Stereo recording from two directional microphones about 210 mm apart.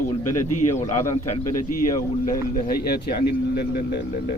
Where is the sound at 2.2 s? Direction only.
40° left (ahead or behind).